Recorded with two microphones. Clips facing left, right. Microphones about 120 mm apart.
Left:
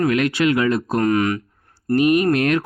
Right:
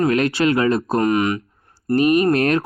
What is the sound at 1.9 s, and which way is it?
Speech, 35° right (ahead or behind).